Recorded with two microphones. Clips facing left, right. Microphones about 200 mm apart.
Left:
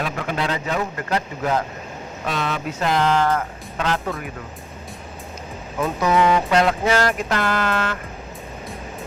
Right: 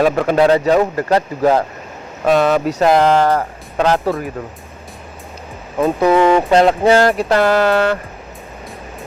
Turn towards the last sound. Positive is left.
turn(degrees=-35)  # may be behind; listen again after turning